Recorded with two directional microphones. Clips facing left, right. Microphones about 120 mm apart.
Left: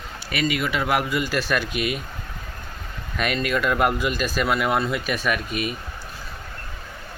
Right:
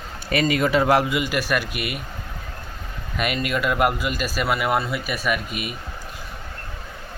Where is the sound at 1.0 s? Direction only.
15° right (ahead or behind).